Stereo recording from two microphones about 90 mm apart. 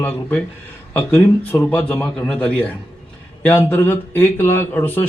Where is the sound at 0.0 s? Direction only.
15° left (ahead or behind).